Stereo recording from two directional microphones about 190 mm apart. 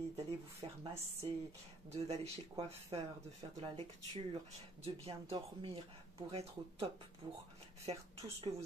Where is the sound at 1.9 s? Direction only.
35° right (ahead or behind).